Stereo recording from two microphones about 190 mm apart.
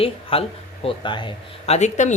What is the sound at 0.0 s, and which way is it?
Speech, 30° left (ahead or behind).